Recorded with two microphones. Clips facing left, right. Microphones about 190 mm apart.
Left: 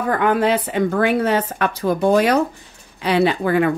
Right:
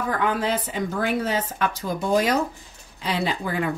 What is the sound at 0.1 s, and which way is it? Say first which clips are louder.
A woman's voice: left 8 dB; 60° left (ahead or behind).